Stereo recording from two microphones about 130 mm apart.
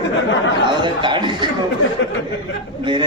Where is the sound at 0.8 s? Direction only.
35° right (ahead or behind).